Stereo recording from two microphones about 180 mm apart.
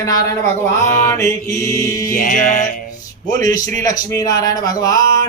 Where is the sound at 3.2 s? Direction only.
20° left (ahead or behind).